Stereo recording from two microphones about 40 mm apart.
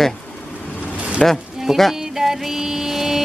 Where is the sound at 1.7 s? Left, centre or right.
Centre.